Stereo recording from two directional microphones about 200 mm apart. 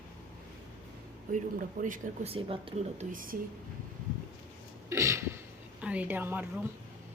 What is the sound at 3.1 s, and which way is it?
Speech, 45° right (ahead or behind).